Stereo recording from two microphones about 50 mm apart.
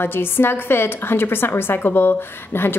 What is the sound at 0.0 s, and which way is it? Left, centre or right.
A woman's voice, left.